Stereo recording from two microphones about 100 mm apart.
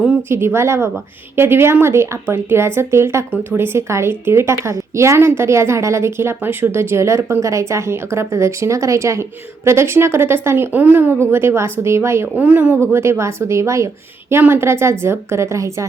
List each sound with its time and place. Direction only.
0.3 s a woman's voice: 25° right (ahead or behind)
12.4 s a woman's voice: 10° right (ahead or behind); by 15.9 s 30° right (ahead or behind)